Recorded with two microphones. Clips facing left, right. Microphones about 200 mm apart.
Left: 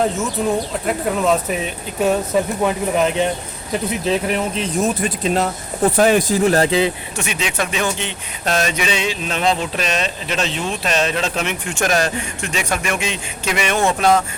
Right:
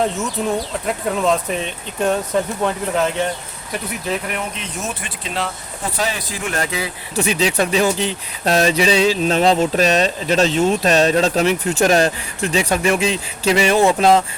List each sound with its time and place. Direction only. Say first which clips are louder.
0.4 s speech: left 2 dB; centre (ahead or behind)
4.1 s speech: left 4 dB; 30° left (ahead or behind)
7.2 s speech: right 7 dB; 35° right (ahead or behind)